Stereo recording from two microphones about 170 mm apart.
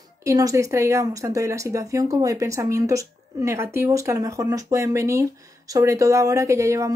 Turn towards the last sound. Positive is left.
turn(degrees=-15)  # may be behind; listen again after turning